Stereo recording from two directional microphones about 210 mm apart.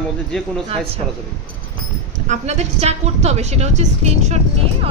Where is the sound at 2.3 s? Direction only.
30° right (ahead or behind).